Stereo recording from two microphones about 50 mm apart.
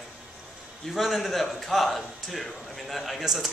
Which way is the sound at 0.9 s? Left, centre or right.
Centre.